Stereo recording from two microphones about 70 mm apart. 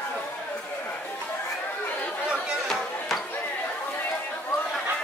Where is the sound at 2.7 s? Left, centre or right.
Centre.